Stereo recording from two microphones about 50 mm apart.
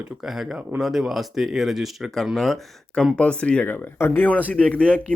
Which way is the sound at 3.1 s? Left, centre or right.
Left.